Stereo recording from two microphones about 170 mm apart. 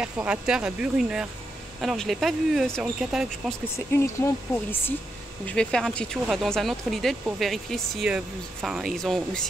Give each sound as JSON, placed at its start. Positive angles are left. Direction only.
{"t": 0.0, "sound": "speech", "side_deg": -5}
{"t": 3.7, "sound": "speech", "side_deg": 15}